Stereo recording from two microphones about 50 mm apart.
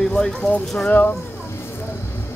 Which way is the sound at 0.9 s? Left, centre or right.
Left.